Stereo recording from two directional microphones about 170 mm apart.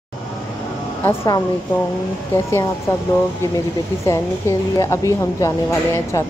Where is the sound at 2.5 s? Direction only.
20° left (ahead or behind).